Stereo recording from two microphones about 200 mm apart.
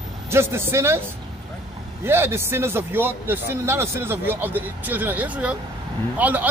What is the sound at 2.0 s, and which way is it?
Speech, 10° right (ahead or behind).